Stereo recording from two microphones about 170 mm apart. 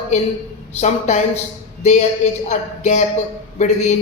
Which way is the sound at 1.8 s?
40° left (ahead or behind).